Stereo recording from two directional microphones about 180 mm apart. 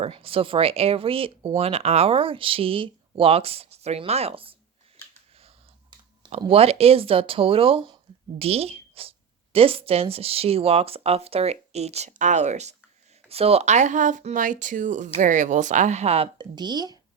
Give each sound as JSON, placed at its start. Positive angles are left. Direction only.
{"t": 0.0, "sound": "speech", "side_deg": -30}
{"t": 6.4, "sound": "speech", "side_deg": -35}